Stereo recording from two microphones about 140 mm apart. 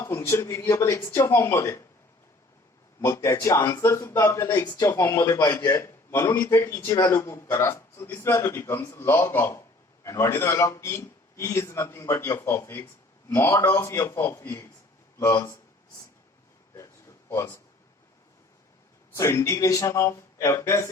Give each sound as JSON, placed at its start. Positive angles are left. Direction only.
{"t": 0.0, "sound": "a man's voice", "side_deg": 20}
{"t": 3.0, "sound": "a man's voice", "side_deg": 20}
{"t": 16.7, "sound": "a sound", "side_deg": 20}
{"t": 19.1, "sound": "a man's voice", "side_deg": 20}